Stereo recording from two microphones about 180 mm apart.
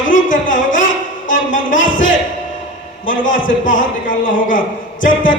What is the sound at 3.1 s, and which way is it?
Speech, 45° left (ahead or behind).